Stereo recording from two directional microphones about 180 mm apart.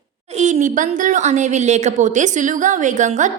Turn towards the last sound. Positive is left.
turn(degrees=-45)  # may be behind; listen again after turning